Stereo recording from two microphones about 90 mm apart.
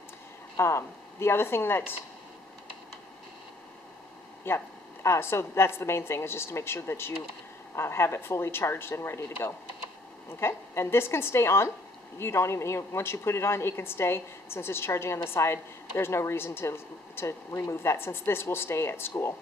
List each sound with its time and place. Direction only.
0.6 s a woman's voice: 30° left (ahead or behind)
4.5 s a woman's voice: 25° left (ahead or behind)